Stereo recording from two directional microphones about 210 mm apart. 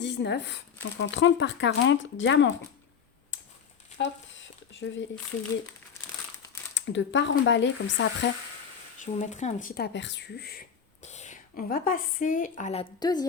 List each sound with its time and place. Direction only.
0.0 s speech: 55° left (ahead or behind)
3.9 s a sound: 60° left (ahead or behind)
6.7 s speech: 60° left (ahead or behind)
9.0 s speech: 35° left (ahead or behind)
11.0 s speech: 35° left (ahead or behind)